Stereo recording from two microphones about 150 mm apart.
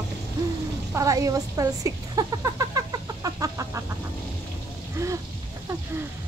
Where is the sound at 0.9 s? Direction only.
20° right (ahead or behind).